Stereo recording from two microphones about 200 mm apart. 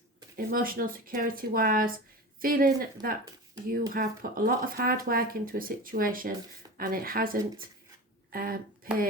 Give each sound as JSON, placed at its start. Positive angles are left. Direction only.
{"t": 0.3, "sound": "speech", "side_deg": -45}